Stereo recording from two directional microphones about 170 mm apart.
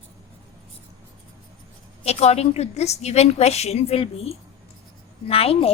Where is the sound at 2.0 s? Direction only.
40° left (ahead or behind).